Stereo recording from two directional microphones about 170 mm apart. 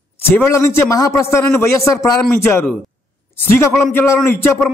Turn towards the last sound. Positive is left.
turn(degrees=15)  # may be behind; listen again after turning